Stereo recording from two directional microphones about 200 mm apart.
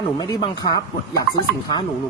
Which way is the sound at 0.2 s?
20° left (ahead or behind).